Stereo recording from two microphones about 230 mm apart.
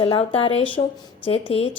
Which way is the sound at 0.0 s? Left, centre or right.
Left.